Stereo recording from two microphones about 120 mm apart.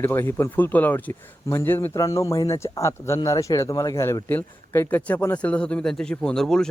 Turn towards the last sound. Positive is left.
turn(degrees=5)  # may be behind; listen again after turning